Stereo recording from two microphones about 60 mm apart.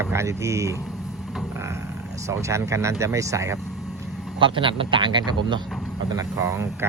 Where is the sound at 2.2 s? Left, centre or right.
Right.